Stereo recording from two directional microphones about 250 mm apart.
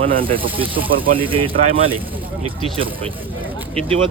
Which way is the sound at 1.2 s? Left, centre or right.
Right.